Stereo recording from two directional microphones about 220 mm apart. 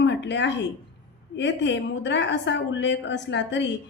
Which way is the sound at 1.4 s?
55° left (ahead or behind).